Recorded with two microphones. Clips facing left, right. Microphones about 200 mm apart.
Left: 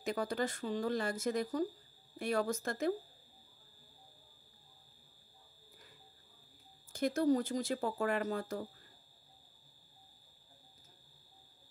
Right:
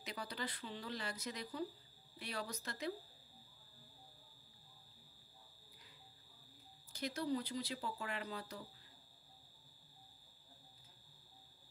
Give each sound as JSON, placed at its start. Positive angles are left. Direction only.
{"t": 0.0, "sound": "speech", "side_deg": 50}
{"t": 6.9, "sound": "speech", "side_deg": 50}